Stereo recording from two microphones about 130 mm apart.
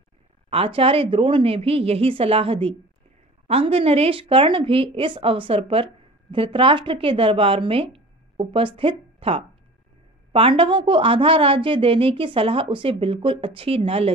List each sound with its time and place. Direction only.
0.5 s a woman's voice: 45° right (ahead or behind)